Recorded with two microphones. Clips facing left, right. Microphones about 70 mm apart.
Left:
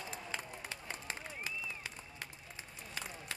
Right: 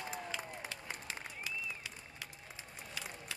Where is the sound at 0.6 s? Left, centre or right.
Left.